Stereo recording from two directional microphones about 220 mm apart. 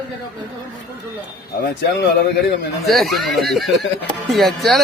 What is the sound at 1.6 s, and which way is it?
Speech, 50° left (ahead or behind).